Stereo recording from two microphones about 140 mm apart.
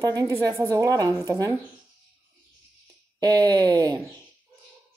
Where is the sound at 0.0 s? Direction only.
25° right (ahead or behind).